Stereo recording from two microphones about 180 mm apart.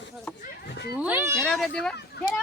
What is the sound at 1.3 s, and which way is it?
Speech, centre (ahead or behind).